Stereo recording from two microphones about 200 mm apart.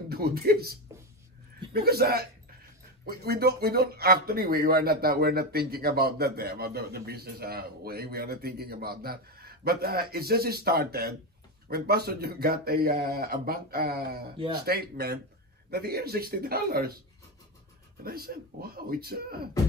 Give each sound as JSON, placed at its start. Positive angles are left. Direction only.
{"t": 0.1, "sound": "speech", "side_deg": -50}
{"t": 14.3, "sound": "speech", "side_deg": -25}
{"t": 14.6, "sound": "speech", "side_deg": -50}
{"t": 18.0, "sound": "speech", "side_deg": -50}